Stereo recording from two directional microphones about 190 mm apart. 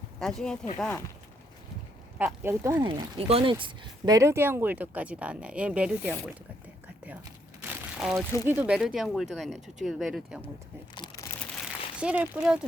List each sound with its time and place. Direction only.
0.2 s speech: 5° left (ahead or behind)
2.1 s speech: 10° right (ahead or behind)
2.8 s speech: 30° right (ahead or behind)
3.5 s speech: 20° right (ahead or behind)
7.6 s crumpling: 5° right (ahead or behind)
8.4 s speech: 10° right (ahead or behind)
11.9 s speech: 5° right (ahead or behind)